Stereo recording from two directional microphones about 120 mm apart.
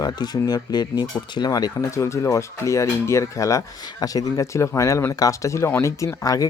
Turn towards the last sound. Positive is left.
turn(degrees=30)  # may be behind; listen again after turning